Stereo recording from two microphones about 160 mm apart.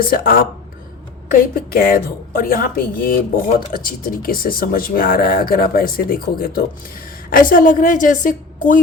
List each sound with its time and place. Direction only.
0.0 s speech: 65° left (ahead or behind)